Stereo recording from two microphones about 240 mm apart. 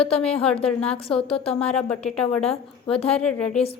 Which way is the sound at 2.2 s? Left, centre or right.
Left.